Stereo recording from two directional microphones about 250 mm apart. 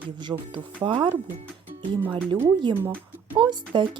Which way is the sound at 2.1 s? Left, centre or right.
Centre.